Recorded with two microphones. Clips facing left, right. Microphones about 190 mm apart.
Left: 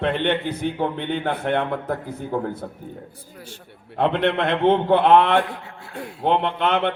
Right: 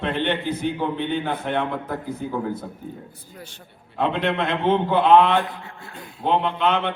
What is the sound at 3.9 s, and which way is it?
A man's voice, 65° left (ahead or behind).